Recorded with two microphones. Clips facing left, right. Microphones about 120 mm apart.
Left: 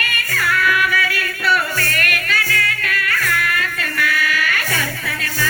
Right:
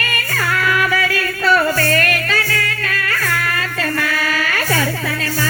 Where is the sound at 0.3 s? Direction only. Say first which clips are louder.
Even; 30° right (ahead or behind).